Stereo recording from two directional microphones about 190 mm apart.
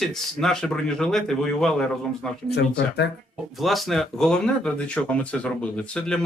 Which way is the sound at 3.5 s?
Centre (ahead or behind).